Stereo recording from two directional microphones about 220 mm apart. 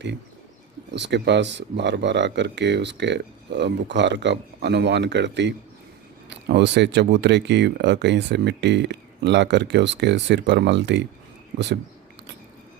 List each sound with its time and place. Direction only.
0.9 s speech: 50° right (ahead or behind)